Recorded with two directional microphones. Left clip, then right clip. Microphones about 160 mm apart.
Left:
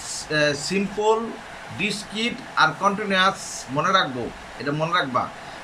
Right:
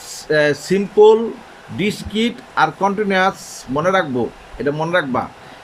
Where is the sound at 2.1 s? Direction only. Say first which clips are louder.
Right 4 dB; 55° right (ahead or behind).